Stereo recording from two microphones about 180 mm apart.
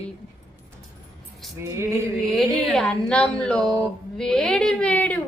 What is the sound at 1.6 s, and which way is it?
Speech, 15° right (ahead or behind).